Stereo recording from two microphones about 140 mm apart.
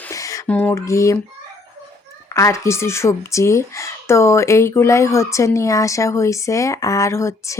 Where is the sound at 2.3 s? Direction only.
20° left (ahead or behind).